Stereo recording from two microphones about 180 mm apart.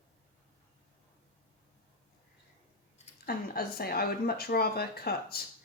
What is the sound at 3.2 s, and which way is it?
Speech, 55° left (ahead or behind).